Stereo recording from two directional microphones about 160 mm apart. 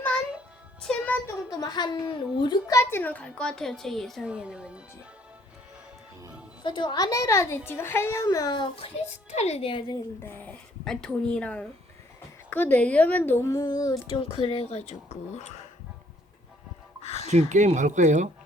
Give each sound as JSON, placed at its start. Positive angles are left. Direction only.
{"t": 0.8, "sound": "music", "side_deg": 5}
{"t": 1.5, "sound": "a woman's voice", "side_deg": 25}
{"t": 6.6, "sound": "a woman's voice", "side_deg": 30}
{"t": 9.0, "sound": "speech", "side_deg": 45}
{"t": 10.2, "sound": "speech", "side_deg": 10}
{"t": 14.2, "sound": "speech", "side_deg": 35}
{"t": 17.0, "sound": "music", "side_deg": 40}
{"t": 17.2, "sound": "speech", "side_deg": -45}